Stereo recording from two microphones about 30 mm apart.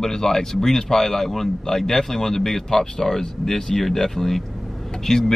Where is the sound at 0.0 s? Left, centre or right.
Centre.